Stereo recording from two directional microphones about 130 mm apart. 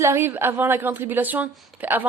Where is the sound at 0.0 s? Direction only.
20° right (ahead or behind).